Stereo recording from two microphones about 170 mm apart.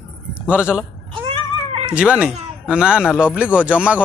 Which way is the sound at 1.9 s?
5° right (ahead or behind).